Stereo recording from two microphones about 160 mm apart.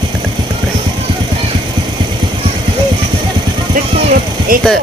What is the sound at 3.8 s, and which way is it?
Vehicle, 60° right (ahead or behind).